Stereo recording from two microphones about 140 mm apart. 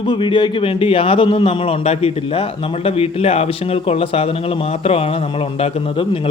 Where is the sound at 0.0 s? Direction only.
35° left (ahead or behind).